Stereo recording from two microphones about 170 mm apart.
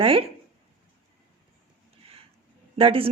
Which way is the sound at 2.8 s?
35° right (ahead or behind).